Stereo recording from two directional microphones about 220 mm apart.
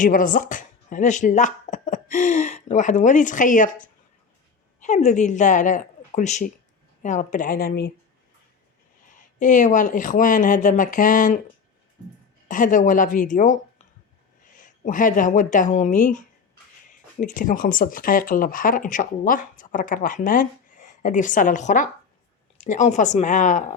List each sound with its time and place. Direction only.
0.0 s speech: 40° left (ahead or behind)
9.0 s speech: 35° left (ahead or behind)
12.5 s speech: 35° left (ahead or behind)